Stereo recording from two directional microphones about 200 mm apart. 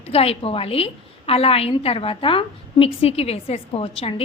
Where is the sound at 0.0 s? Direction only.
30° left (ahead or behind).